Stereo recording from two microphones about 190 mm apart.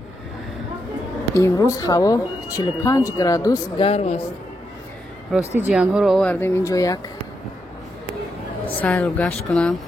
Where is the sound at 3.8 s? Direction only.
35° left (ahead or behind).